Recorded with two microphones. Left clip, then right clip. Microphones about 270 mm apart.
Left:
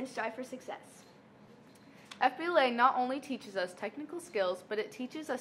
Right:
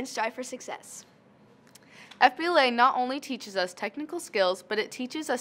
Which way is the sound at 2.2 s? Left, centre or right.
Right.